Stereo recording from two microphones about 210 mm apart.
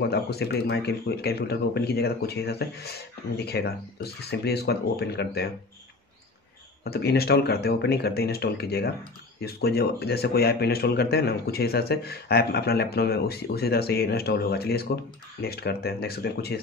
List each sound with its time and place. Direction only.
0.0 s speech: 50° left (ahead or behind)
6.8 s speech: 50° left (ahead or behind)